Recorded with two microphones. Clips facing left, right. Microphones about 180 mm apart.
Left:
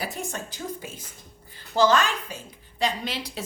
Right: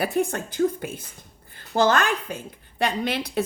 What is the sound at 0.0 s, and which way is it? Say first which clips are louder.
A woman's voice: right 9 dB; 60° right (ahead or behind).